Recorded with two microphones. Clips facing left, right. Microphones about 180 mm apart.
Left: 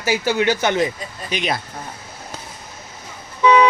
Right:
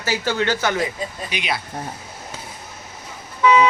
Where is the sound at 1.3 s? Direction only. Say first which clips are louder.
Left 6 dB; 45° left (ahead or behind).